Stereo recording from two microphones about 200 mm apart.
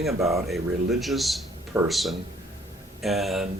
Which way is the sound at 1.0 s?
Centre (ahead or behind).